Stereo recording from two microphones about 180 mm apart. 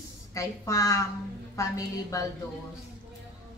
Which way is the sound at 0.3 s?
20° left (ahead or behind).